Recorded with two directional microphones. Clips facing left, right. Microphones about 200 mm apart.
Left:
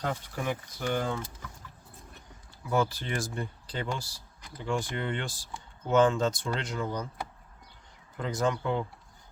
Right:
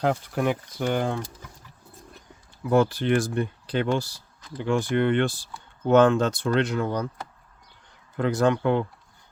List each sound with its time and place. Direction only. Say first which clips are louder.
0.0 s speech: right 9 dB; 70° right (ahead or behind)
2.6 s speech: right 8 dB; 65° right (ahead or behind)
8.1 s speech: right 7 dB; 70° right (ahead or behind)